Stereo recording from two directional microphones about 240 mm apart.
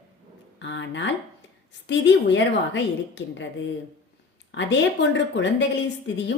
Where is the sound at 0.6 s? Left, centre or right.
Left.